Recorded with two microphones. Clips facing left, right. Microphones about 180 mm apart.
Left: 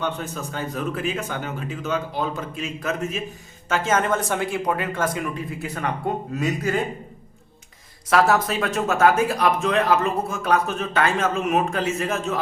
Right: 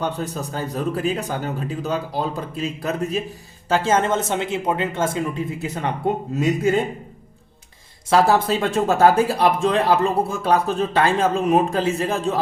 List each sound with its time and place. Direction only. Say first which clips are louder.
0.0 s speech: right 2 dB; 35° right (ahead or behind)
8.1 s speech: right 2 dB; 30° right (ahead or behind)